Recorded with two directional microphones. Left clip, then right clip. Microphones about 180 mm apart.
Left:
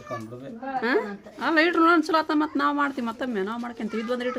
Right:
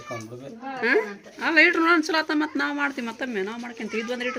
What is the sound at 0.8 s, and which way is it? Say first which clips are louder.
A woman's voice: right 3 dB; 15° left (ahead or behind).